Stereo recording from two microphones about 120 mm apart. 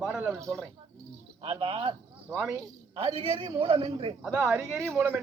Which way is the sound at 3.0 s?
55° right (ahead or behind).